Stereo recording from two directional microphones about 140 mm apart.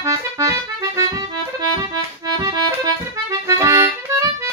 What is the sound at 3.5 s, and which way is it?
Music, 25° right (ahead or behind).